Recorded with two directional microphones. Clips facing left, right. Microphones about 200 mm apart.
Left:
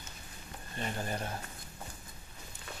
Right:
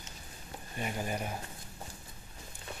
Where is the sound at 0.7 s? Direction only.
10° right (ahead or behind).